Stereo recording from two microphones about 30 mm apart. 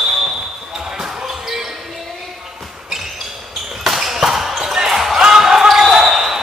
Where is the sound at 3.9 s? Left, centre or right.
Centre.